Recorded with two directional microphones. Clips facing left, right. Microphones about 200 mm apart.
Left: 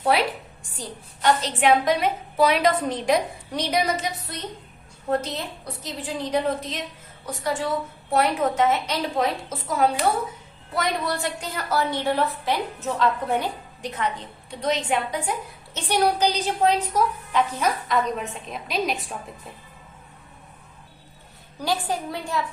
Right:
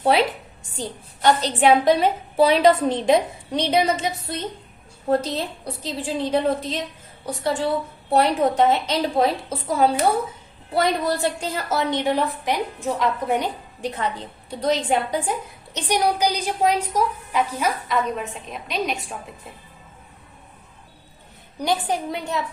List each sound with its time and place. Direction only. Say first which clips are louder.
0.0 s a woman's voice: right 3 dB; 25° right (ahead or behind)
13.8 s a woman's voice: right 2 dB; 35° right (ahead or behind)
15.7 s a woman's voice: even; 15° right (ahead or behind)
21.6 s a woman's voice: right 3 dB; 20° right (ahead or behind)